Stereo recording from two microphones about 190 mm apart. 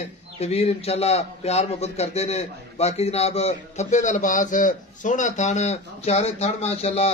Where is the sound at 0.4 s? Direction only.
30° left (ahead or behind).